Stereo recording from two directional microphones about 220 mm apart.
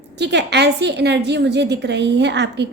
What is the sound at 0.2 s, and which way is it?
A woman's voice, 50° right (ahead or behind).